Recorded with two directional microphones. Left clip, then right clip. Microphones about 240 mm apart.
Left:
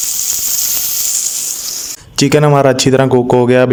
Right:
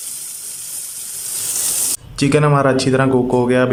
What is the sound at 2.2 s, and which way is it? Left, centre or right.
Speech, left.